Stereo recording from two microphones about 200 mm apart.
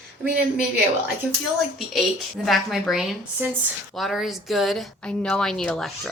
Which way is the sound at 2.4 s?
Centre (ahead or behind).